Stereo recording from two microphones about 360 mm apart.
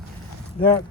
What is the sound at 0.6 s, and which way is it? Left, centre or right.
Speech, centre.